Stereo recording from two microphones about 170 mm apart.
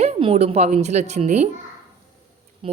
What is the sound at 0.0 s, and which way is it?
Speech, 40° right (ahead or behind).